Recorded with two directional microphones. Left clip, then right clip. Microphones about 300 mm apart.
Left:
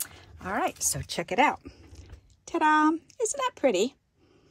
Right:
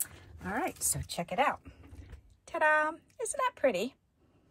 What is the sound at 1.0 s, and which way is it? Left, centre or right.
Speech, left.